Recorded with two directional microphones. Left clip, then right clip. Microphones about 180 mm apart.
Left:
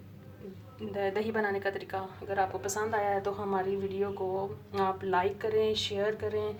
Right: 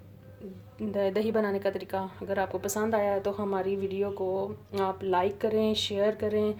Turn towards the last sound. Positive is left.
turn(degrees=-50)  # may be behind; listen again after turning